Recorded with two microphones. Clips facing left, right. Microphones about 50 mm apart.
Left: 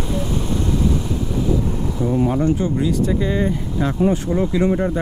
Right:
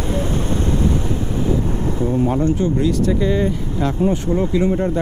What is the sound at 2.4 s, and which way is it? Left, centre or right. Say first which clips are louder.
Speech: right 1 dB; centre.